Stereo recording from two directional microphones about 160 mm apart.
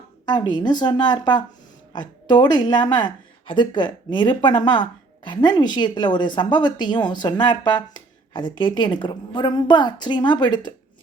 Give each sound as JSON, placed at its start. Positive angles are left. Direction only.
{"t": 0.3, "sound": "speech", "side_deg": 30}